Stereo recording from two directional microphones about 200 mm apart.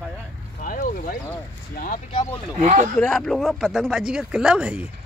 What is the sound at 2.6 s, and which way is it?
Speech, 35° right (ahead or behind).